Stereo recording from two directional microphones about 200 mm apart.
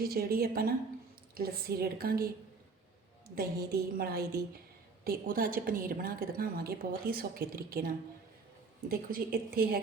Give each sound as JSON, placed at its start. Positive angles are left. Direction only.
{"t": 0.0, "sound": "a woman's voice", "side_deg": -50}
{"t": 3.3, "sound": "a woman's voice", "side_deg": -50}